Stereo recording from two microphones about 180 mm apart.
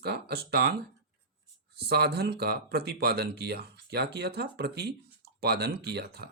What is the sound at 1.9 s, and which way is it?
Speech, 60° right (ahead or behind).